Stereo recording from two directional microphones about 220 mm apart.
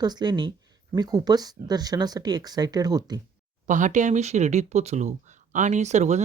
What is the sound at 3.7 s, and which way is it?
Speech, 35° right (ahead or behind).